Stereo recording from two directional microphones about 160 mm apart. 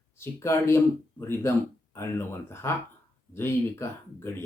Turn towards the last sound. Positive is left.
turn(degrees=15)  # may be behind; listen again after turning